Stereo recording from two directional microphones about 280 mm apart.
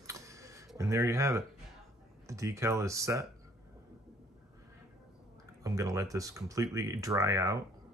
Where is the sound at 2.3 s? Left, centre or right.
Centre.